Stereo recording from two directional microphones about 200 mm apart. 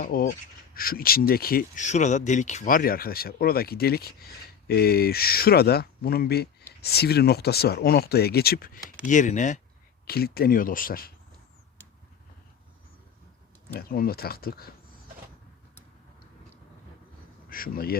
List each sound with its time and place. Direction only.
0.0 s speech: 45° left (ahead or behind)
10.1 s speech: 50° left (ahead or behind)
13.7 s speech: 50° left (ahead or behind)
17.5 s speech: 45° left (ahead or behind)